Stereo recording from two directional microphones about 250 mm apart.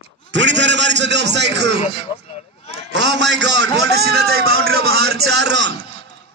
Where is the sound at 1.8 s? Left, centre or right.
Left.